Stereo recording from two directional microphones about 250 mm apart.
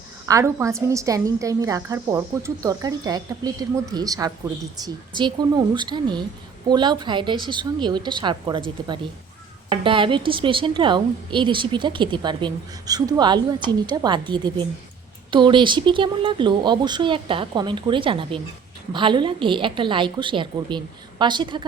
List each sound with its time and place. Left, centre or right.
0.3 s a woman's voice: centre
9.6 s a woman's voice: centre